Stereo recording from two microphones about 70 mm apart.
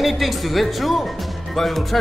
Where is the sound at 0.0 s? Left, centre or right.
Centre.